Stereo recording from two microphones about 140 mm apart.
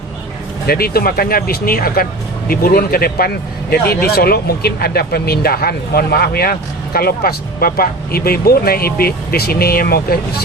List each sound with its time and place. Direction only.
0.7 s speech: 90° left